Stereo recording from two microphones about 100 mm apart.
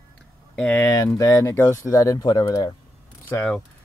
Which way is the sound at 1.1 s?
30° left (ahead or behind).